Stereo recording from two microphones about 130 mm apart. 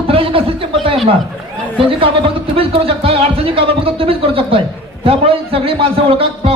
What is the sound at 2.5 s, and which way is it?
A man's voice, 45° right (ahead or behind).